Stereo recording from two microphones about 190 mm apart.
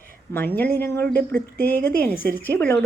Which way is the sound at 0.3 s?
10° left (ahead or behind).